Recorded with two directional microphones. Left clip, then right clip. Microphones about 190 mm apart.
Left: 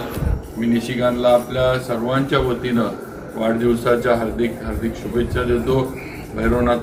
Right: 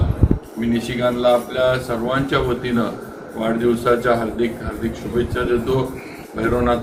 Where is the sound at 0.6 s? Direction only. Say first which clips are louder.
Left 1 dB; 5° left (ahead or behind).